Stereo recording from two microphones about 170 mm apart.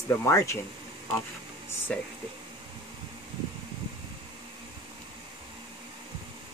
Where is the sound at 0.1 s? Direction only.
15° left (ahead or behind).